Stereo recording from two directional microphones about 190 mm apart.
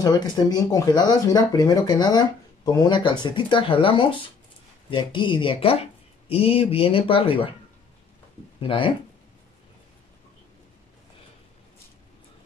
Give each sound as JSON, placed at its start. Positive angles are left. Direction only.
{"t": 0.0, "sound": "speech", "side_deg": 20}
{"t": 8.5, "sound": "speech", "side_deg": 25}